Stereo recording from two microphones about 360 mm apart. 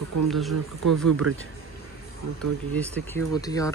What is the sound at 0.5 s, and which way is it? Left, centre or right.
Speech, right.